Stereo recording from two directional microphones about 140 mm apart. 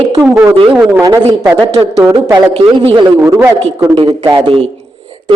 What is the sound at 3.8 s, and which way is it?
Speech, 35° right (ahead or behind).